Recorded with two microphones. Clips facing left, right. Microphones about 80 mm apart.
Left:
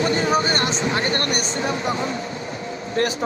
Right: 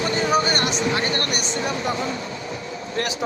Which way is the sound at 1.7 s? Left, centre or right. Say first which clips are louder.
Left 1 dB; left.